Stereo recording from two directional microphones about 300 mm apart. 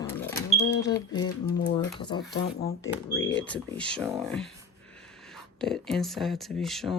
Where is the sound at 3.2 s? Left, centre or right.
Left.